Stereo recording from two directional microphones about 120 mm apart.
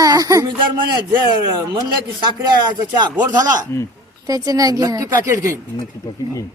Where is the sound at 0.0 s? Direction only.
30° right (ahead or behind).